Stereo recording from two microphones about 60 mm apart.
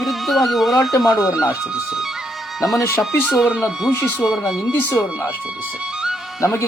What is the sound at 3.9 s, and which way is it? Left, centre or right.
Speech, left.